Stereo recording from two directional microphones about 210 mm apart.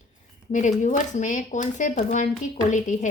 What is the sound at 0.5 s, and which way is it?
Speech, 35° left (ahead or behind).